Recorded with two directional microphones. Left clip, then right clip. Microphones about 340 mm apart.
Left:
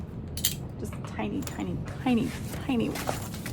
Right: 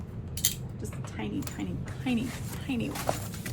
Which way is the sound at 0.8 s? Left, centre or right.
Centre.